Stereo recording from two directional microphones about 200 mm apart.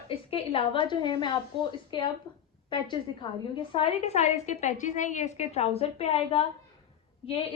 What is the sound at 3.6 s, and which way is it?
A woman's voice, 25° left (ahead or behind).